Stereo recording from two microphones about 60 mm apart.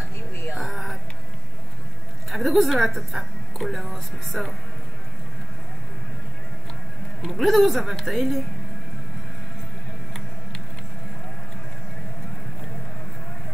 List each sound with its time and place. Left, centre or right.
0.6 s music: centre
2.3 s a woman's voice: centre
7.2 s a woman's voice: centre